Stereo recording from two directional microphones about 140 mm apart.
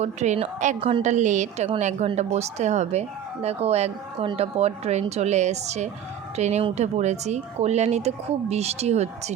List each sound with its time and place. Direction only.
0.0 s a woman's voice: 55° right (ahead or behind)